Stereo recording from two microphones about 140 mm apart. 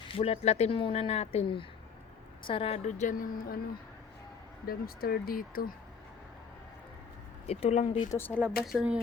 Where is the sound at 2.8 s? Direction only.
60° left (ahead or behind); by 3.6 s 90° left.